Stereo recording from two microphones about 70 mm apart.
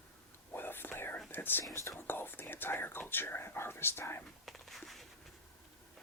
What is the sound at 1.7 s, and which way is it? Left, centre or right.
Speech, left.